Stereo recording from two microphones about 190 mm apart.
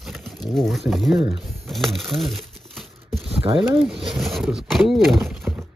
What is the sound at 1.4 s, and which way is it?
Crumpling, centre (ahead or behind).